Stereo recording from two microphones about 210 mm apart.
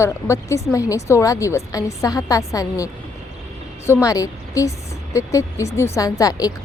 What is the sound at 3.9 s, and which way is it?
Speech, 15° left (ahead or behind).